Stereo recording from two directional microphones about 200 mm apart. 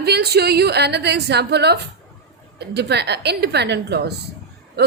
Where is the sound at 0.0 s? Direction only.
55° right (ahead or behind).